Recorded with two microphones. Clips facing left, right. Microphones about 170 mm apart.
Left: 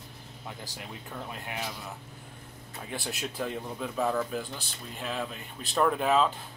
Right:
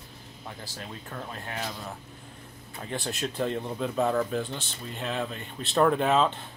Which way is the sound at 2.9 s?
5° left (ahead or behind).